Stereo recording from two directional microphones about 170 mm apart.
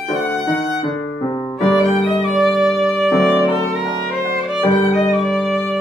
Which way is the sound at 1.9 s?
Centre (ahead or behind).